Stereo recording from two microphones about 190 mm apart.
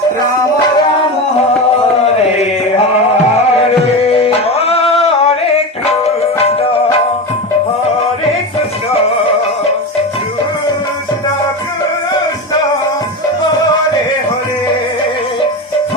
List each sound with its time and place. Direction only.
4.2 s music: 30° left (ahead or behind)